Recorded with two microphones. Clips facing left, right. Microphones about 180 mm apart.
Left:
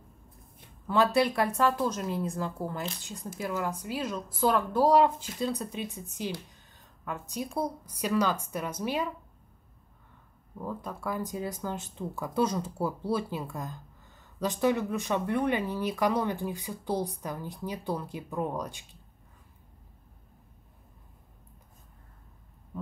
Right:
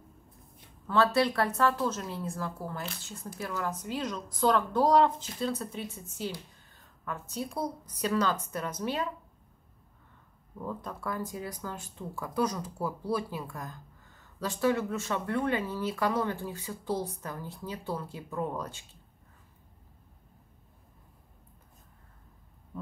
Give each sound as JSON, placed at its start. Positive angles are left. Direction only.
{"t": 0.8, "sound": "a woman's voice", "side_deg": 15}
{"t": 10.6, "sound": "a woman's voice", "side_deg": 10}
{"t": 11.2, "sound": "a woman's voice", "side_deg": 20}